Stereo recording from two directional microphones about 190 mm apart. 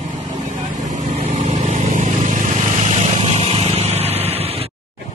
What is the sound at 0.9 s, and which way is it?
Vehicle, 35° right (ahead or behind).